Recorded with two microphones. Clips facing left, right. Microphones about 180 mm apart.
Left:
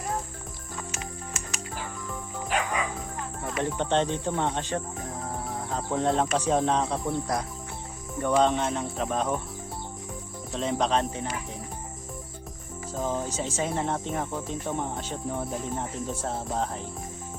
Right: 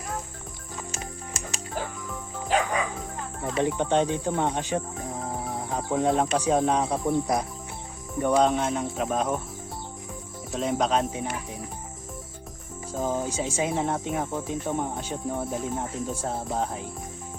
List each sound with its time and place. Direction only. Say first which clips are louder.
3.4 s music: right 4 dB; 20° right (ahead or behind)
3.8 s speech: right 2 dB; 10° right (ahead or behind)
5.5 s music: right 1 dB; 20° right (ahead or behind)
5.9 s speech: right 2 dB; 5° right (ahead or behind)
8.4 s speech: even; centre (ahead or behind)
10.5 s speech: right 1 dB; 5° right (ahead or behind)
12.9 s speech: right 2 dB; centre (ahead or behind)